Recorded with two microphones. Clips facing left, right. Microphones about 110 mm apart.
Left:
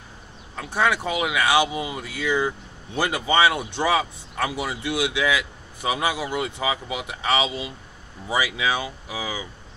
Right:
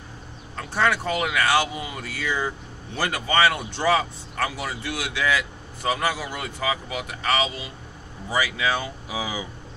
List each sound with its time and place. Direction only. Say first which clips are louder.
0.6 s speech: even; 10° left (ahead or behind); by 9.5 s 5° right (ahead or behind)